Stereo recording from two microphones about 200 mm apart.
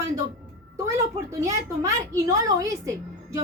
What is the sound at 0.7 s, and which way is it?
A woman's voice, 15° right (ahead or behind).